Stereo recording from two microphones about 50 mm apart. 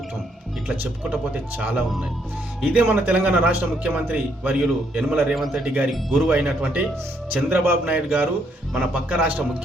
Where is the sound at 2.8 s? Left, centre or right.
Right.